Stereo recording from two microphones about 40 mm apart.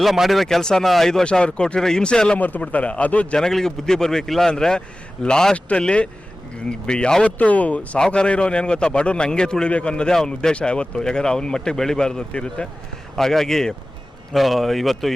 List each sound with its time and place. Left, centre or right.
0.0 s speech: centre
0.4 s speech: centre
1.2 s speech: left
2.4 s a man's voice: left
3.3 s speech: centre
5.5 s a man's voice: left
7.3 s a man's voice: left
7.9 s speech: left
10.1 s speech: centre
10.5 s speech: left
13.1 s speech: centre
14.3 s speech: centre